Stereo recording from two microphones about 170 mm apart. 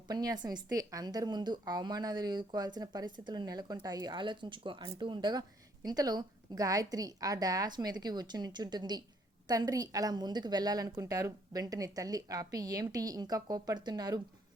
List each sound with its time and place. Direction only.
0.1 s a woman's voice: 25° right (ahead or behind)